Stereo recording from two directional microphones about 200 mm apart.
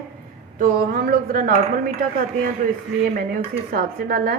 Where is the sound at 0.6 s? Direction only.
45° right (ahead or behind).